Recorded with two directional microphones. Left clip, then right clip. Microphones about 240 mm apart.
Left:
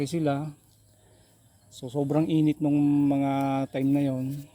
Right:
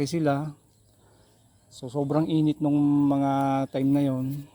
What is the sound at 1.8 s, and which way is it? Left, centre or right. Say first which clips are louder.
Speech: even; centre.